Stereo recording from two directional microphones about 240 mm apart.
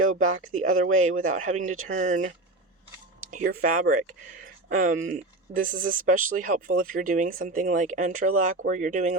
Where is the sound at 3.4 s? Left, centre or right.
Right.